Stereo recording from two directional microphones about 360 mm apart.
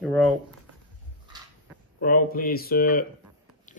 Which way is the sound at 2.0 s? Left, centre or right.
Left.